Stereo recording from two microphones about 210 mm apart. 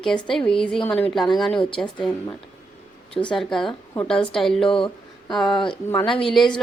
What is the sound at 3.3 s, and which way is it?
A woman's voice, centre (ahead or behind).